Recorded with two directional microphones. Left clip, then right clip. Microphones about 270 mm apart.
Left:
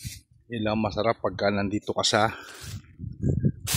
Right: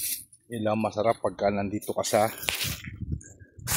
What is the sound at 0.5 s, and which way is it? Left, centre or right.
Speech, centre.